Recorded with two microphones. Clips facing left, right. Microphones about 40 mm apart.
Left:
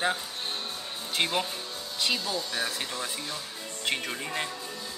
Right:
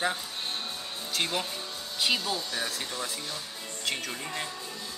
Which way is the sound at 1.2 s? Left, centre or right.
Centre.